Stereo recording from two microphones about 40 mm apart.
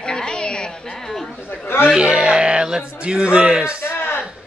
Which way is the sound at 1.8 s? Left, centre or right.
Centre.